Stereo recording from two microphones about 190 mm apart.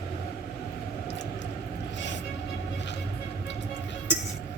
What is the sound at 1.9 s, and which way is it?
Vehicle, 70° left (ahead or behind).